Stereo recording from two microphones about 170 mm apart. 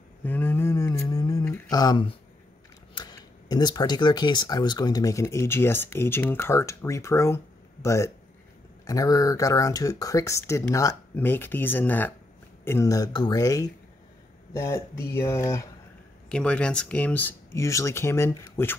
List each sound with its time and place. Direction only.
0.2 s a sound: 10° left (ahead or behind)
2.9 s speech: 25° left (ahead or behind)
16.3 s speech: 5° left (ahead or behind)